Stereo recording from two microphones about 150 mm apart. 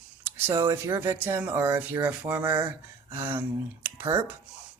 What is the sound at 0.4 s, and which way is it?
Speech, 20° right (ahead or behind).